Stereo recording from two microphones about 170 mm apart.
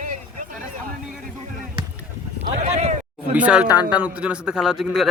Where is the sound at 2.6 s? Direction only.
40° right (ahead or behind).